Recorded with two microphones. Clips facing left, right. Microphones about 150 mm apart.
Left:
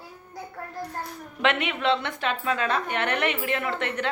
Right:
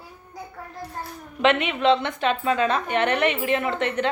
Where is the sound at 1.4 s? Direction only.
20° right (ahead or behind).